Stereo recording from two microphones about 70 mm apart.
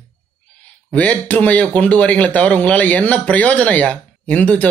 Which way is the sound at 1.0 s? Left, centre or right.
Left.